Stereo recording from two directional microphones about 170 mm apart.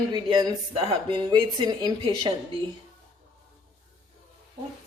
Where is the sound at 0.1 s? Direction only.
25° right (ahead or behind).